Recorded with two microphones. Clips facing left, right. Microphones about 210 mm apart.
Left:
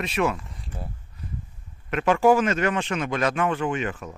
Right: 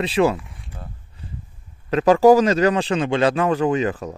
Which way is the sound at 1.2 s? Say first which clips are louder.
Left 1 dB; 30° right (ahead or behind).